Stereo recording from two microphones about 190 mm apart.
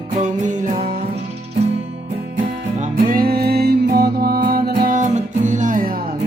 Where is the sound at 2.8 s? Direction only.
50° right (ahead or behind).